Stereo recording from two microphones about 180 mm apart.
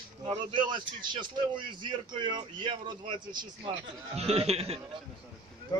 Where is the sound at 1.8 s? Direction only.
25° right (ahead or behind).